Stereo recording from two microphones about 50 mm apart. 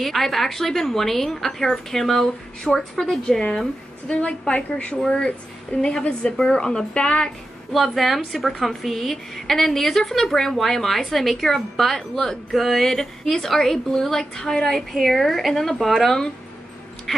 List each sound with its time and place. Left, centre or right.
0.0 s a woman's voice: centre
3.0 s speech: centre
4.1 s a woman's voice: left
7.7 s a woman's voice: centre